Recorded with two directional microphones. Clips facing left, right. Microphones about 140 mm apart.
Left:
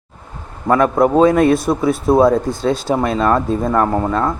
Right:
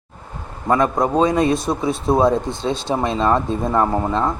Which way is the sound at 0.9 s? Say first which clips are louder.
Left 5 dB; 5° left (ahead or behind).